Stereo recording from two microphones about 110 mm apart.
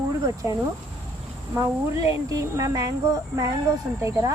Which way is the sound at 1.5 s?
30° right (ahead or behind).